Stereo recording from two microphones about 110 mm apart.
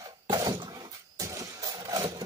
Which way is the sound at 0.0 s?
35° right (ahead or behind).